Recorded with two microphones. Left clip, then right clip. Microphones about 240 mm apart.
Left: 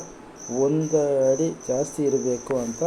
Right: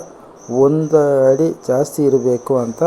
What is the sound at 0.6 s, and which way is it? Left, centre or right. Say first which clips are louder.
Speech: right 9 dB; right.